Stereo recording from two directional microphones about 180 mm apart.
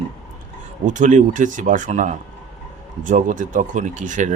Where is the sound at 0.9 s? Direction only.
45° right (ahead or behind).